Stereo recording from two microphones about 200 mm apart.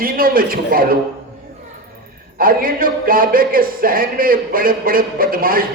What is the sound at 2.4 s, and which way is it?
Speech, 45° right (ahead or behind).